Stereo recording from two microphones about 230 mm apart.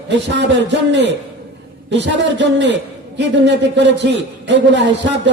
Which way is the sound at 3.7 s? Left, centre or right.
Right.